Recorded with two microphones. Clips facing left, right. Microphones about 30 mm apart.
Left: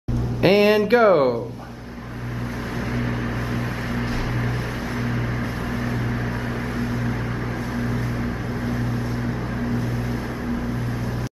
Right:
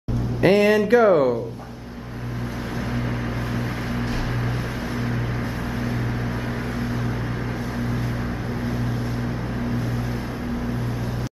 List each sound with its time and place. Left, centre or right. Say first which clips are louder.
0.4 s speech: left 1 dB; left